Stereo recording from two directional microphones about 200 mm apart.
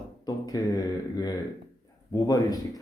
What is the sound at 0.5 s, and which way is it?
A man's voice, 20° left (ahead or behind).